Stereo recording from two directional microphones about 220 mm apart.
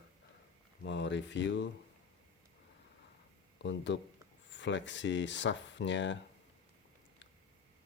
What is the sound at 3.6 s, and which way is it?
Speech, 55° left (ahead or behind).